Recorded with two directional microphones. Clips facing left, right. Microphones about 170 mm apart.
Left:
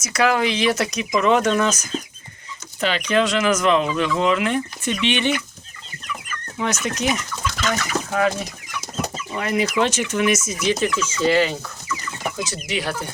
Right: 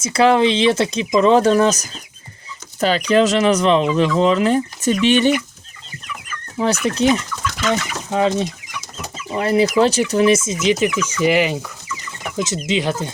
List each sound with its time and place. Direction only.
0.0 s speech: 30° right (ahead or behind)
6.6 s speech: 35° right (ahead or behind); by 11.5 s 15° right (ahead or behind)
12.6 s speech: 20° right (ahead or behind)